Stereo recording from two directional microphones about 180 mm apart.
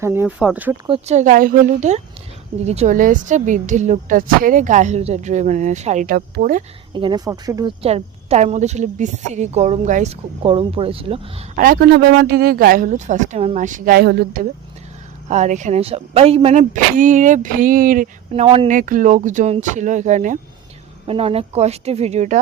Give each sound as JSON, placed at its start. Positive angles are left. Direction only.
{"t": 0.0, "sound": "speech", "side_deg": -10}
{"t": 0.9, "sound": "a woman's voice", "side_deg": -35}
{"t": 6.9, "sound": "speech", "side_deg": -25}
{"t": 7.8, "sound": "a woman's voice", "side_deg": -35}
{"t": 11.5, "sound": "speech", "side_deg": -55}
{"t": 15.3, "sound": "speech", "side_deg": -40}
{"t": 18.4, "sound": "speech", "side_deg": -30}
{"t": 18.7, "sound": "speech", "side_deg": -45}
{"t": 21.1, "sound": "a woman's voice", "side_deg": -30}